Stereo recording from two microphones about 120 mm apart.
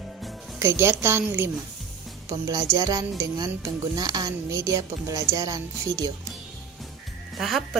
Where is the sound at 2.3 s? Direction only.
30° right (ahead or behind).